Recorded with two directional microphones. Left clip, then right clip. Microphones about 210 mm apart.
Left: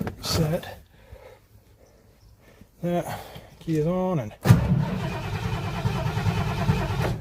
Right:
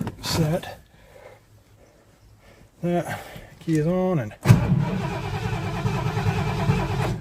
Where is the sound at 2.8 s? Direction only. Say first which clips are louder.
Right 2 dB; centre (ahead or behind).